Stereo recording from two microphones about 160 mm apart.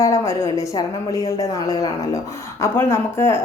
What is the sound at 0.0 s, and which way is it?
A woman's voice, 20° left (ahead or behind).